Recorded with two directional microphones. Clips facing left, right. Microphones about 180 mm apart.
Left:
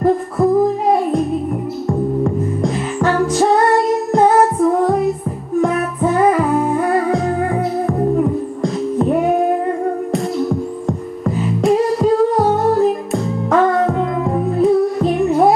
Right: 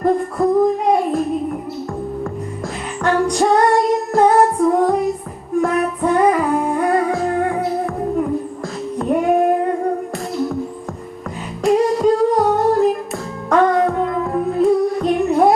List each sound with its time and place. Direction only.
0.0 s singing: centre (ahead or behind)
1.9 s music: 15° left (ahead or behind)
3.0 s music: centre (ahead or behind)
9.1 s female singing: centre (ahead or behind)
10.1 s music: centre (ahead or behind)
11.3 s humming: centre (ahead or behind)
14.6 s music: centre (ahead or behind)